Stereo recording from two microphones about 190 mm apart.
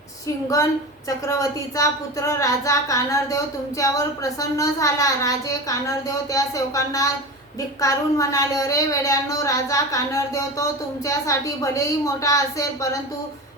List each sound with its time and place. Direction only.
0.4 s a woman's voice: 15° left (ahead or behind)